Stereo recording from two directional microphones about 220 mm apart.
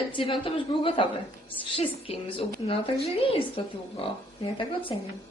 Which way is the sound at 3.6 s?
25° left (ahead or behind).